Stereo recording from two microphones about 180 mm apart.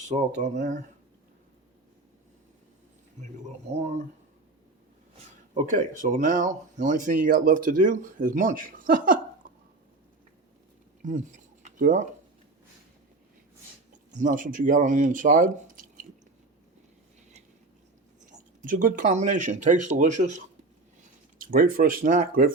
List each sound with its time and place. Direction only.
0.1 s speech: 40° right (ahead or behind)
3.8 s speech: 40° right (ahead or behind)
5.5 s speech: 45° right (ahead or behind)
11.0 s a sound: 45° right (ahead or behind)
13.9 s speech: 45° right (ahead or behind)
18.3 s speech: 45° right (ahead or behind)